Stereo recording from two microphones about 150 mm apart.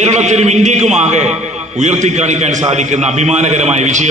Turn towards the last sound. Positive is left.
turn(degrees=-50)  # may be behind; listen again after turning